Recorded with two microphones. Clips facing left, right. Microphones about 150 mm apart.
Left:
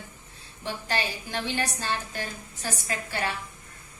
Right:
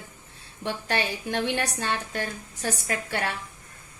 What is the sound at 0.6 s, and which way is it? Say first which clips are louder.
A woman's voice: right 2 dB; 60° right (ahead or behind).